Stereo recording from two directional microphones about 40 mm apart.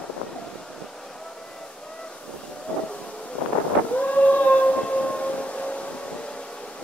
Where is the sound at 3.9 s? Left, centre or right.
Left.